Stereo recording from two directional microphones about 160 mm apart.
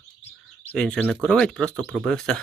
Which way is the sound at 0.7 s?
5° left (ahead or behind).